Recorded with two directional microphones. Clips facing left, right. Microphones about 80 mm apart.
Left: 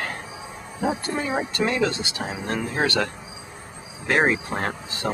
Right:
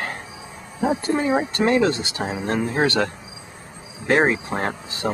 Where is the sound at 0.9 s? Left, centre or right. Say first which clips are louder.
Right 5 dB; right.